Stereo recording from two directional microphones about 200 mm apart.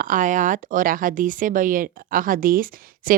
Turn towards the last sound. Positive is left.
turn(degrees=-45)  # may be behind; listen again after turning